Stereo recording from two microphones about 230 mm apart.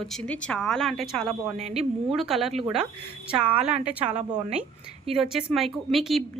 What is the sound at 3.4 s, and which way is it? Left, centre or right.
Speech, right.